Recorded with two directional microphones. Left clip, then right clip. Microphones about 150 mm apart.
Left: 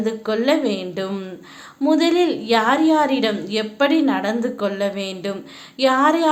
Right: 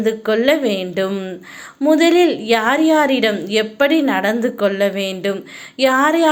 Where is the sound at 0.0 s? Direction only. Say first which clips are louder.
Right 5 dB; 20° right (ahead or behind).